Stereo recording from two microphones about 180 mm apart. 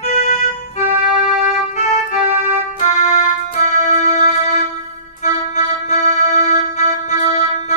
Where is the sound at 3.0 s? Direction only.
40° left (ahead or behind).